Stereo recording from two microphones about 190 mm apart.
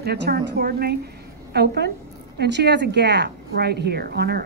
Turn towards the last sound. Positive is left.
turn(degrees=-60)  # may be behind; listen again after turning